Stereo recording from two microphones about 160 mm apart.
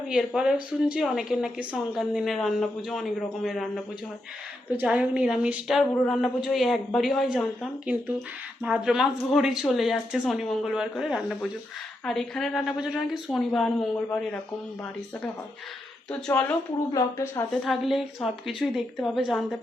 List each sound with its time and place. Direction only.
0.1 s a woman's voice: 5° right (ahead or behind)
16.9 s a woman's voice: 20° left (ahead or behind)
17.5 s speech: centre (ahead or behind)